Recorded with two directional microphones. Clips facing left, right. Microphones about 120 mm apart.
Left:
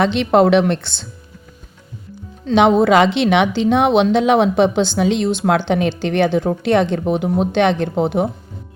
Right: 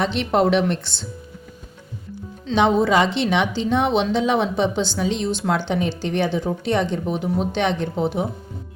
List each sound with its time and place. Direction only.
0.0 s a woman's voice: 85° left
2.5 s a woman's voice: 70° left (ahead or behind)